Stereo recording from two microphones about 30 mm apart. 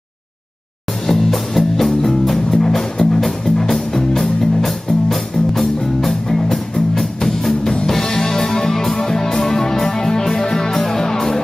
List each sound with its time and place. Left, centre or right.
1.0 s music: centre